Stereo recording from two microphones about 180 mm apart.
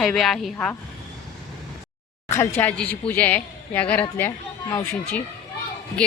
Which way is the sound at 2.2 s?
15° left (ahead or behind).